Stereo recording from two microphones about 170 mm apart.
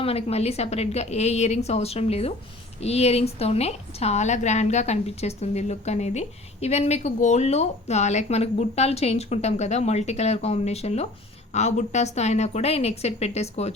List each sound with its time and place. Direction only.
0.0 s a woman's voice: 35° left (ahead or behind)